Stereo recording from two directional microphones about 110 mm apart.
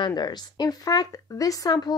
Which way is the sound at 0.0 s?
40° left (ahead or behind).